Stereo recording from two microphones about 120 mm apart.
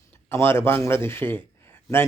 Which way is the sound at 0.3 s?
20° left (ahead or behind).